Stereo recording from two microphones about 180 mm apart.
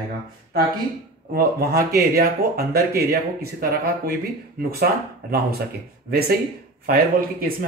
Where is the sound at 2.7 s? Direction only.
55° right (ahead or behind).